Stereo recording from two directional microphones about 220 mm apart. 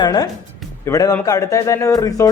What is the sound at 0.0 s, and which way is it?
Speech, 20° left (ahead or behind).